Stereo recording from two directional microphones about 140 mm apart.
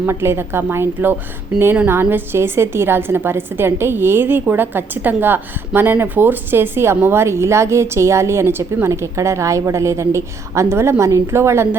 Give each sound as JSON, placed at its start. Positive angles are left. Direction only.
{"t": 0.0, "sound": "a woman's voice", "side_deg": -20}